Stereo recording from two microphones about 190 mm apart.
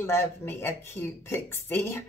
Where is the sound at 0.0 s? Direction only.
10° left (ahead or behind).